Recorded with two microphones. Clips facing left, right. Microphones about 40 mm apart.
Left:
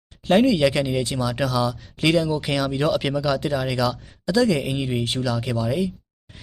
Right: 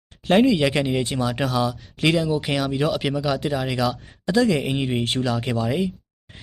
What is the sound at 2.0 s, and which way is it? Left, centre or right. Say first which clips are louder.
Speech: even; centre.